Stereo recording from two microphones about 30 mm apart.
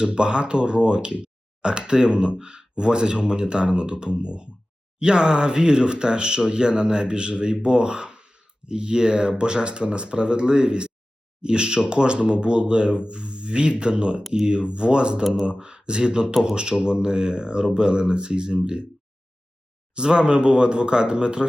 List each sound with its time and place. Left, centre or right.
0.0 s speech: right
19.9 s speech: right